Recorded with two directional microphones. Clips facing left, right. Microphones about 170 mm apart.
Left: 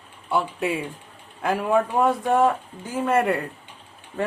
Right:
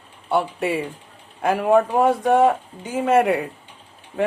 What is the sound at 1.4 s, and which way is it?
Speech, 60° right (ahead or behind).